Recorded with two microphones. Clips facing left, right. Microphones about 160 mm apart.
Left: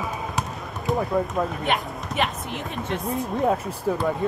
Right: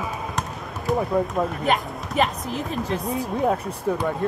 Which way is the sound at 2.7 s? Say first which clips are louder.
Even; centre (ahead or behind).